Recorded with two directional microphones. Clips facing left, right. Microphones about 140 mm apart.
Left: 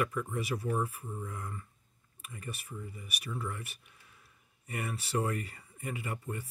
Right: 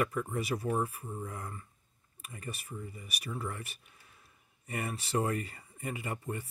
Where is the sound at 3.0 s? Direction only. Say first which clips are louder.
Even; 35° right (ahead or behind).